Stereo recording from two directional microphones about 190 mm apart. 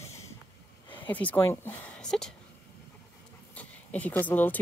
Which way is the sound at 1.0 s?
10° left (ahead or behind).